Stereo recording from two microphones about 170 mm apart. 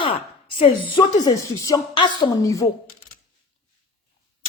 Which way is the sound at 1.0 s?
20° left (ahead or behind).